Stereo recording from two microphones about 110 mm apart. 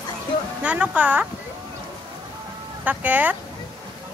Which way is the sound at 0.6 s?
15° right (ahead or behind).